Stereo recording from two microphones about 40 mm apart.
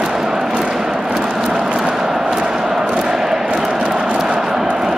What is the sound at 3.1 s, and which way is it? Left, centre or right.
Crowd, centre.